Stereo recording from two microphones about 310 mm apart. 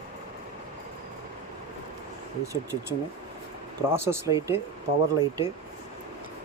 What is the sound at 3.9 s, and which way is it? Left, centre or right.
Speech, centre.